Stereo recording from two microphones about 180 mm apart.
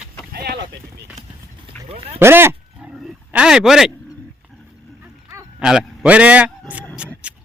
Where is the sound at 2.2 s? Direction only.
15° right (ahead or behind).